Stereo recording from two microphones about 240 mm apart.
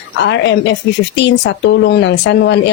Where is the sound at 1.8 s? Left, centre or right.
Left.